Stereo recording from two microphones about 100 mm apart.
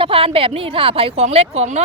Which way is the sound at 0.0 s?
65° right (ahead or behind).